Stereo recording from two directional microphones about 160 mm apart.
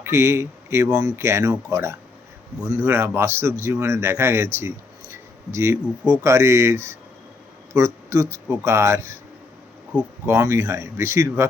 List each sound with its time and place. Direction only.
0.0 s speech: 15° right (ahead or behind)
10.2 s speech: 20° right (ahead or behind)